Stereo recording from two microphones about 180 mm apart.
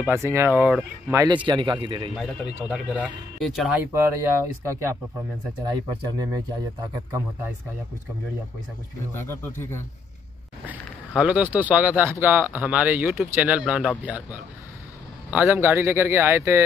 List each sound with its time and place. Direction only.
0.0 s speech: 15° right (ahead or behind)
1.2 s speech: 25° right (ahead or behind)
2.1 s speech: 5° right (ahead or behind); by 6.4 s 20° right (ahead or behind)
9.1 s speech: 15° left (ahead or behind)
10.6 s speech: 10° right (ahead or behind)